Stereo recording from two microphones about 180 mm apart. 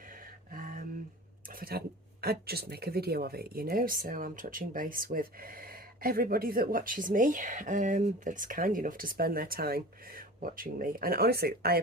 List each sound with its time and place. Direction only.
0.1 s music: 50° right (ahead or behind)
1.5 s a sound: 55° right (ahead or behind)
2.2 s speech: 60° right (ahead or behind)